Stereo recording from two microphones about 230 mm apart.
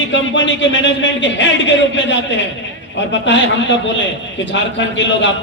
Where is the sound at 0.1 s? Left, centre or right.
Left.